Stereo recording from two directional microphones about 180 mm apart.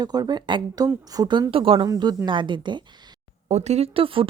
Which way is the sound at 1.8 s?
20° right (ahead or behind).